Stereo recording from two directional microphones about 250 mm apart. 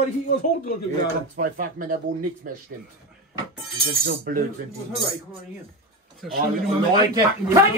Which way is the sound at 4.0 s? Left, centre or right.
Right.